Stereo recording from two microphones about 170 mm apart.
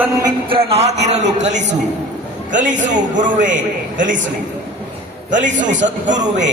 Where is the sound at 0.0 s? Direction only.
25° right (ahead or behind); by 4.2 s 50° right (ahead or behind).